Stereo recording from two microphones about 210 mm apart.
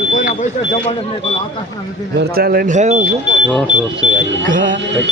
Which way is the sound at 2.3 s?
45° right (ahead or behind).